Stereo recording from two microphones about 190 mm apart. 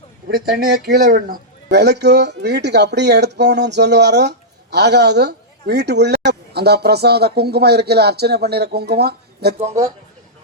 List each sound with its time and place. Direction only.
0.3 s a man's voice: 55° right (ahead or behind)
9.6 s a man's voice: 35° right (ahead or behind)